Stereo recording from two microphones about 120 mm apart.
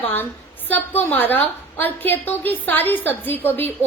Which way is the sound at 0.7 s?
15° left (ahead or behind).